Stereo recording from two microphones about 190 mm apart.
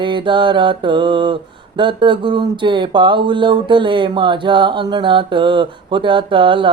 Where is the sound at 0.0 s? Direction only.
25° right (ahead or behind).